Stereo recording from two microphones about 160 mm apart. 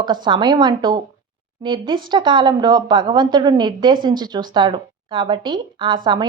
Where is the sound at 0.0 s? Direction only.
30° right (ahead or behind).